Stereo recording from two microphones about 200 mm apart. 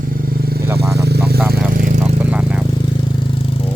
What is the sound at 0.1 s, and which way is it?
Motorcycle, 45° right (ahead or behind).